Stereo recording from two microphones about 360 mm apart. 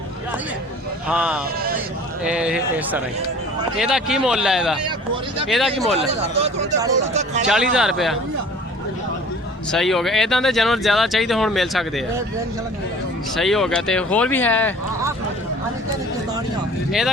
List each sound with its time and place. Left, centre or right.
1.0 s speech: centre
6.0 s speech: centre
7.4 s speech: centre
9.7 s speech: centre
13.3 s speech: centre